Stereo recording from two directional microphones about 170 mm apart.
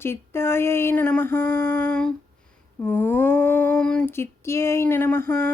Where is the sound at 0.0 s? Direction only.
15° left (ahead or behind).